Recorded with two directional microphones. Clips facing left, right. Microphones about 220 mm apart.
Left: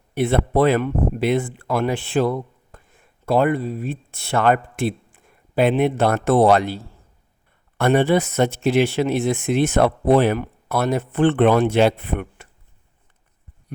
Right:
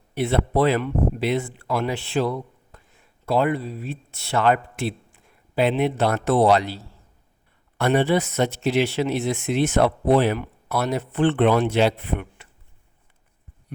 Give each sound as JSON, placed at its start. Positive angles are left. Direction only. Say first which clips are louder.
{"t": 0.1, "sound": "speech", "louder": "left 3 dB", "side_deg": 50}